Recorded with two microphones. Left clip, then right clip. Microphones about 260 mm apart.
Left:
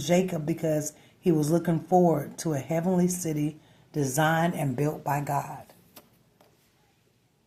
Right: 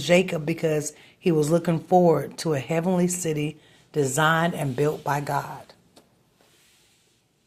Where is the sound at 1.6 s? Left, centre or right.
Right.